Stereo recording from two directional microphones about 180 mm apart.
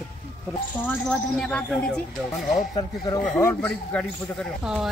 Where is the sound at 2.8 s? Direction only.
20° left (ahead or behind).